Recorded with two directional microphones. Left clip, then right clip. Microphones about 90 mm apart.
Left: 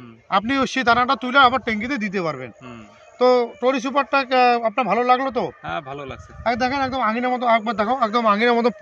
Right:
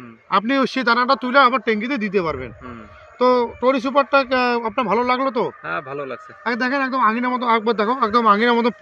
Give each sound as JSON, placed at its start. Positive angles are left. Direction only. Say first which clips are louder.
{"t": 0.3, "sound": "speech", "louder": "right 2 dB", "side_deg": 55}
{"t": 5.7, "sound": "speech", "louder": "right 3 dB", "side_deg": 15}
{"t": 6.4, "sound": "speech", "louder": "even", "side_deg": 45}